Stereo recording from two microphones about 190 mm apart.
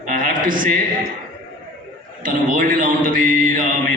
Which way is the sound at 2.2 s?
45° right (ahead or behind).